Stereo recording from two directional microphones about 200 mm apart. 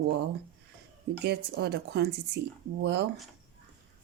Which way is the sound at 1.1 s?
55° right (ahead or behind).